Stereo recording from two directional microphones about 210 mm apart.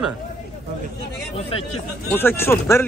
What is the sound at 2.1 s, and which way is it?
Speech, 10° left (ahead or behind).